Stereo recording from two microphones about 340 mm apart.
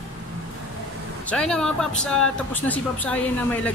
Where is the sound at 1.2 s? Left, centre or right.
Centre.